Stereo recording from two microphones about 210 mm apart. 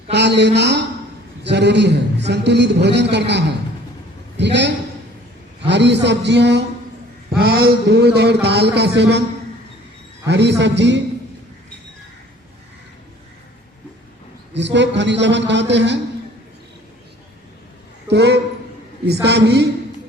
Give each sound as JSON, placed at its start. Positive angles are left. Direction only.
{"t": 0.1, "sound": "a man's voice", "side_deg": -55}
{"t": 10.2, "sound": "a man's voice", "side_deg": -55}
{"t": 14.5, "sound": "a man's voice", "side_deg": -55}
{"t": 18.1, "sound": "a man's voice", "side_deg": -55}